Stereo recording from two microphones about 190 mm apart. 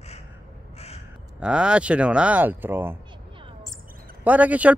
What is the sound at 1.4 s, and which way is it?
Speech, 5° right (ahead or behind).